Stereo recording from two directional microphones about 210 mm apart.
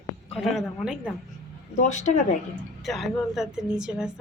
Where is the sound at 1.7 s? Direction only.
35° left (ahead or behind).